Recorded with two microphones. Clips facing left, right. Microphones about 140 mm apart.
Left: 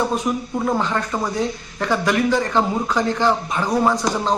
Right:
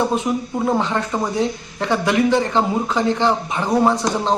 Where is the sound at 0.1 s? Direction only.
20° right (ahead or behind).